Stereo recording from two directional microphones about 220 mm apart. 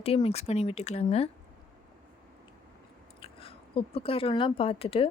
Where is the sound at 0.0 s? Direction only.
25° left (ahead or behind).